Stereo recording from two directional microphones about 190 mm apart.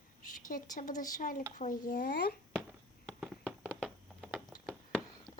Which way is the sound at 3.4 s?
Centre (ahead or behind).